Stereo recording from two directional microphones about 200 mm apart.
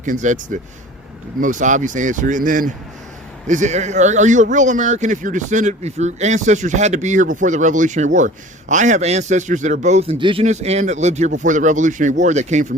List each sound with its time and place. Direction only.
0.0 s speech: 40° right (ahead or behind)